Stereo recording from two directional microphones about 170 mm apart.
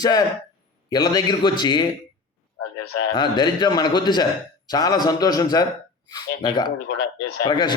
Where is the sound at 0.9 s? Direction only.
25° left (ahead or behind).